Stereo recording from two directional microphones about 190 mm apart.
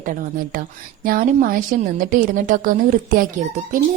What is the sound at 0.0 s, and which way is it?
A woman's voice, 45° right (ahead or behind).